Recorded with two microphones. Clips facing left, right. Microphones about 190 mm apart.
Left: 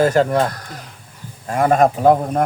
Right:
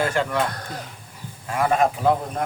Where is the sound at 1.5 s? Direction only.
45° left (ahead or behind).